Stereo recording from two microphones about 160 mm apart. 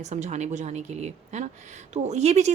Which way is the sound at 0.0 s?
45° right (ahead or behind).